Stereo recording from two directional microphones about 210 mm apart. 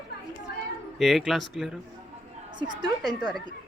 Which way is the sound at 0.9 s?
Centre (ahead or behind).